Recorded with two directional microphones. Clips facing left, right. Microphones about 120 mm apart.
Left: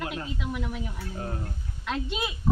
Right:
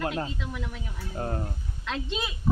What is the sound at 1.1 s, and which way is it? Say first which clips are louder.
Speech: right 5 dB; 40° right (ahead or behind).